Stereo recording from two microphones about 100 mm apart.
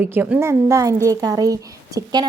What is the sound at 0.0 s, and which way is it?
A woman's voice, 20° right (ahead or behind).